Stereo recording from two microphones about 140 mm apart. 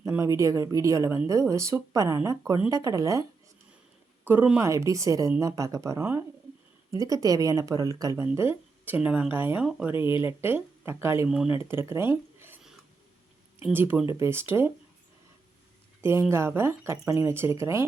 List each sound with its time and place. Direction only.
0.1 s speech: 20° right (ahead or behind)
4.2 s speech: 15° right (ahead or behind)
9.6 s speech: 5° right (ahead or behind)
10.2 s speech: 15° right (ahead or behind)
11.3 s speech: 5° right (ahead or behind)
11.5 s speech: 15° right (ahead or behind)
13.7 s speech: 15° right (ahead or behind)
16.0 s speech: 15° right (ahead or behind)